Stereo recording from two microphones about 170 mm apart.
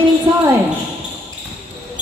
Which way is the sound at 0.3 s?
25° right (ahead or behind).